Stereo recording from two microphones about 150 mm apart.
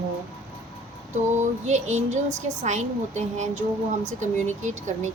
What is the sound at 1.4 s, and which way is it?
Music, 50° right (ahead or behind).